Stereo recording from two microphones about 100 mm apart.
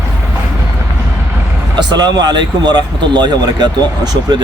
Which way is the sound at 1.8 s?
45° right (ahead or behind).